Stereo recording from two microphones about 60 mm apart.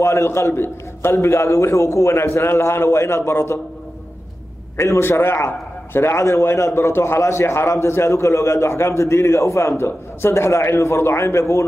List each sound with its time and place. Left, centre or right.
0.0 s a man's voice: left
1.1 s a man's voice: left
4.7 s a man's voice: left